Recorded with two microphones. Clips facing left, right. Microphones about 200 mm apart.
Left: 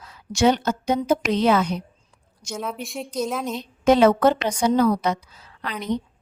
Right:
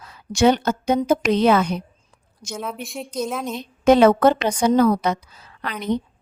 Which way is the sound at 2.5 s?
Centre (ahead or behind).